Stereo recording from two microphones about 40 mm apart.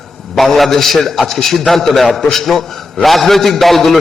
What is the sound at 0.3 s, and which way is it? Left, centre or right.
A man's voice, centre.